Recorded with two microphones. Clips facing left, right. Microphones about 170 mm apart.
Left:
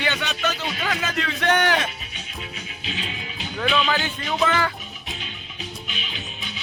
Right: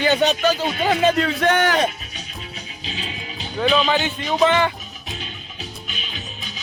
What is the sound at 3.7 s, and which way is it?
Speech, 35° right (ahead or behind).